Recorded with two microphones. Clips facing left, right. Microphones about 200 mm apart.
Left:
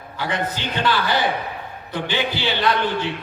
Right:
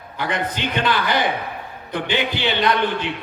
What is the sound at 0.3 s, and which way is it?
Speech, 20° right (ahead or behind).